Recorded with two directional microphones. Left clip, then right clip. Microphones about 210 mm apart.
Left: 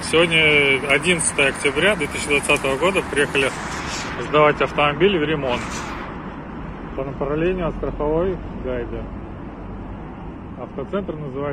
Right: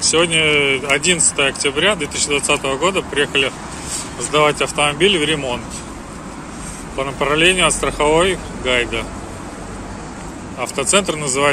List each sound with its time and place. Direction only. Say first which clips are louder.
0.1 s speech: left 1 dB; 10° right (ahead or behind)
7.0 s speech: right 7 dB; 15° right (ahead or behind)
10.8 s speech: right 10 dB; 25° right (ahead or behind)